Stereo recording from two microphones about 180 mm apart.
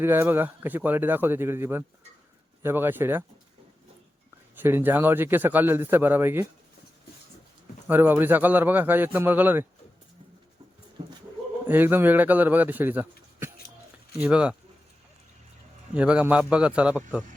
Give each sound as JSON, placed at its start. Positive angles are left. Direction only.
{"t": 0.0, "sound": "a man's voice", "side_deg": -10}
{"t": 4.5, "sound": "a man's voice", "side_deg": -10}
{"t": 7.9, "sound": "a man's voice", "side_deg": -10}
{"t": 11.0, "sound": "a sound", "side_deg": -35}
{"t": 11.7, "sound": "a man's voice", "side_deg": -10}
{"t": 16.0, "sound": "a man's voice", "side_deg": -5}